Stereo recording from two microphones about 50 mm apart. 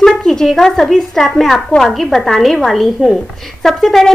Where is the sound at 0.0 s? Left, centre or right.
Centre.